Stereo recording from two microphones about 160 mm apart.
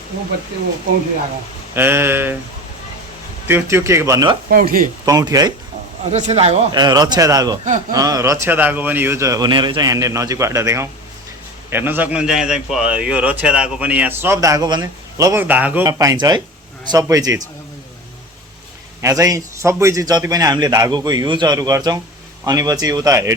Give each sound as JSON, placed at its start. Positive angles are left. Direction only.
{"t": 1.7, "sound": "a man's voice", "side_deg": -15}
{"t": 3.4, "sound": "a man's voice", "side_deg": -15}
{"t": 4.4, "sound": "speech", "side_deg": -65}
{"t": 5.0, "sound": "a man's voice", "side_deg": -20}
{"t": 6.1, "sound": "speech", "side_deg": -45}
{"t": 6.7, "sound": "a man's voice", "side_deg": -25}
{"t": 7.6, "sound": "a man's voice", "side_deg": -50}
{"t": 7.9, "sound": "a man's voice", "side_deg": -20}
{"t": 15.9, "sound": "a man's voice", "side_deg": -25}
{"t": 19.0, "sound": "a man's voice", "side_deg": -20}